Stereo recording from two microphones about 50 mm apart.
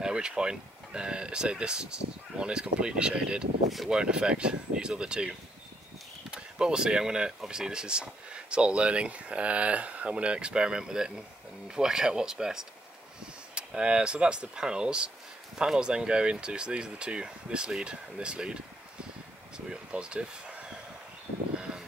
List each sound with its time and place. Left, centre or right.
0.0 s speech: centre
6.3 s speech: centre
21.5 s vehicle: centre